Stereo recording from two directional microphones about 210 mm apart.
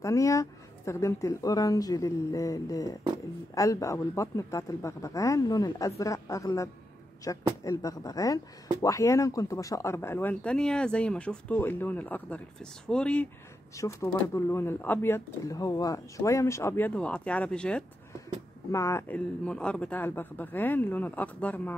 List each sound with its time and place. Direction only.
0.0 s speech: 15° left (ahead or behind)